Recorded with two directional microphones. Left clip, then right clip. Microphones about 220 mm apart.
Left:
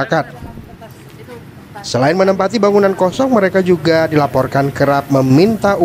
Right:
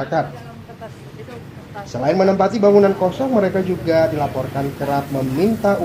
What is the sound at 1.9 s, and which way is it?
A man's voice, 45° left (ahead or behind).